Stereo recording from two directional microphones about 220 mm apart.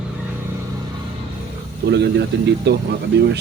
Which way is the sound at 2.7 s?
50° right (ahead or behind).